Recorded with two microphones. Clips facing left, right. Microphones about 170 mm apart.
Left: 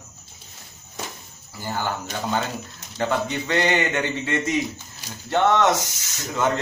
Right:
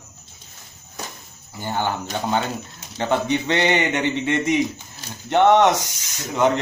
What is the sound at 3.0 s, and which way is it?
Speech, 20° right (ahead or behind).